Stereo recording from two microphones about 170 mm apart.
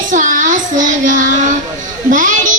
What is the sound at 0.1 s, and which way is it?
Child singing, 50° right (ahead or behind).